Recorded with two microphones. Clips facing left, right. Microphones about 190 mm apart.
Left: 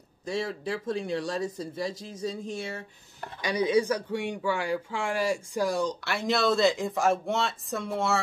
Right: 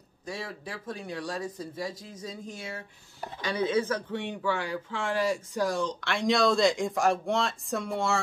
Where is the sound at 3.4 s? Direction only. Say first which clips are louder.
Left 3 dB; 15° left (ahead or behind).